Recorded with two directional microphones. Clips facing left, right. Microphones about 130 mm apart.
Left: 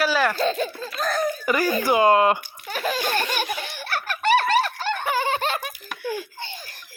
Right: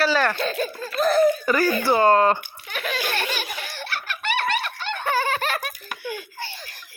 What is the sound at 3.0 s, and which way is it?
Laughter, 50° left (ahead or behind).